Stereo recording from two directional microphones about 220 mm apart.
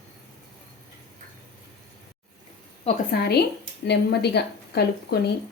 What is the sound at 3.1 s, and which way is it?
Speech, 45° left (ahead or behind).